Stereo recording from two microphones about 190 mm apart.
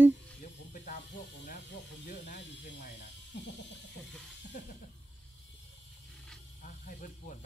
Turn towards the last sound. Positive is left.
turn(degrees=45)  # may be behind; listen again after turning